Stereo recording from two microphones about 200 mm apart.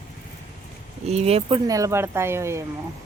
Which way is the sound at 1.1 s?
30° right (ahead or behind).